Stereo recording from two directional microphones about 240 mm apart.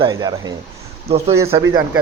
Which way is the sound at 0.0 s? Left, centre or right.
Centre.